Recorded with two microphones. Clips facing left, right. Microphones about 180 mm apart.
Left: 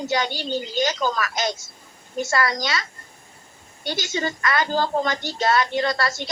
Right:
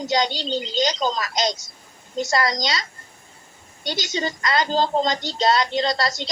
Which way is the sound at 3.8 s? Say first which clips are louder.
Even; 20° right (ahead or behind).